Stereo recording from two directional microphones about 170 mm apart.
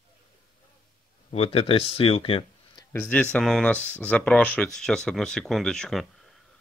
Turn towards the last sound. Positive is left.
turn(degrees=0)  # may be behind; listen again after turning